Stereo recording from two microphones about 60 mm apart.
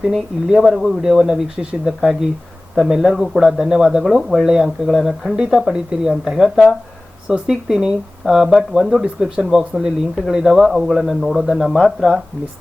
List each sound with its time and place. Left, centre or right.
0.1 s a man's voice: centre